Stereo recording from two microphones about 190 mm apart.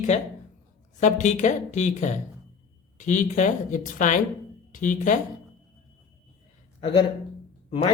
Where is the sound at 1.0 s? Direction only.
40° left (ahead or behind).